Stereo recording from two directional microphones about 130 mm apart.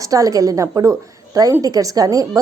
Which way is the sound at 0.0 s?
25° right (ahead or behind).